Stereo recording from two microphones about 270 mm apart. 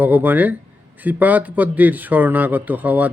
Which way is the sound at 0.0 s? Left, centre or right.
Centre.